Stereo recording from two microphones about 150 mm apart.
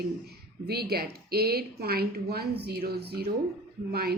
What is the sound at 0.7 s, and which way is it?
A woman's voice, 90° right.